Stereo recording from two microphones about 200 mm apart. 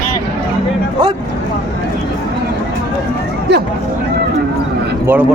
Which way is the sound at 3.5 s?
60° right (ahead or behind).